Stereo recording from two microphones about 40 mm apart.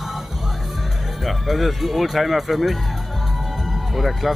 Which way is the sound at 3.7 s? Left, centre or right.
Centre.